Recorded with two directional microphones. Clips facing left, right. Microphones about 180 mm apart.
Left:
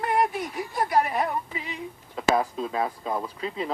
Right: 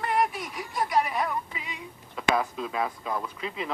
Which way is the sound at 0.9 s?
50° left (ahead or behind).